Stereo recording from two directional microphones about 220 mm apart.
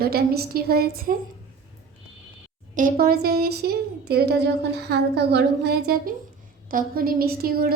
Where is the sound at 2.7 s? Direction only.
40° right (ahead or behind).